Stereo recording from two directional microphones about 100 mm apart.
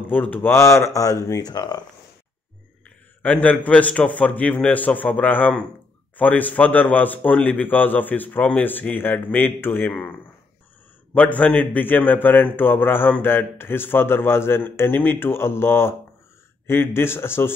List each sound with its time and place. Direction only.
0.1 s a man's voice: 15° left (ahead or behind)
1.5 s speech: 45° left (ahead or behind)
3.2 s a man's voice: 15° left (ahead or behind)
11.1 s a man's voice: 15° left (ahead or behind)